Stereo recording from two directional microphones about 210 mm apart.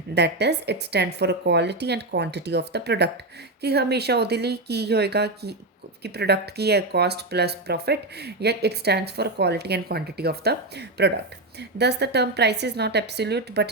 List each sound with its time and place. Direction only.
0.1 s speech: 55° right (ahead or behind)